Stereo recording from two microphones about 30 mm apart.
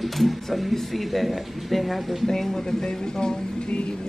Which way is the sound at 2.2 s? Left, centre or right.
Centre.